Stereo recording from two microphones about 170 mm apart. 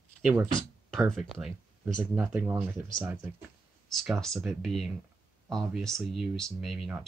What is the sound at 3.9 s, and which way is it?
Speech, centre (ahead or behind).